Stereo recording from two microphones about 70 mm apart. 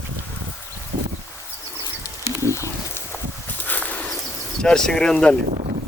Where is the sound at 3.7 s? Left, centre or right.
Left.